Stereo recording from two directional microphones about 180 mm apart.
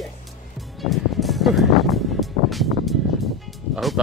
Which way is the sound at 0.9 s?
Centre (ahead or behind).